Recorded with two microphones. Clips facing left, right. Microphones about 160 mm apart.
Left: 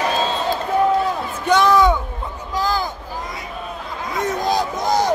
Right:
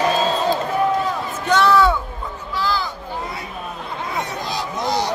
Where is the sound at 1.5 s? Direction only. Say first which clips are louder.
Left 1 dB; 15° left (ahead or behind).